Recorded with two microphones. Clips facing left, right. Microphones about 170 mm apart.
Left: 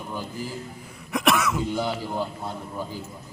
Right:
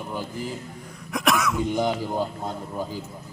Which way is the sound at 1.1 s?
Centre (ahead or behind).